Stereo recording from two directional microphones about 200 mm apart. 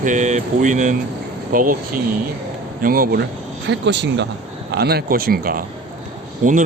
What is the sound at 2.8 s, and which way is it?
Speech, 45° right (ahead or behind).